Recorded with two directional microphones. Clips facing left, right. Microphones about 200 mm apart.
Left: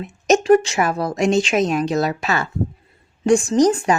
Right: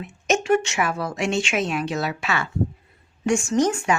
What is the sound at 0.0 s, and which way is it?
A woman's voice, 40° left (ahead or behind).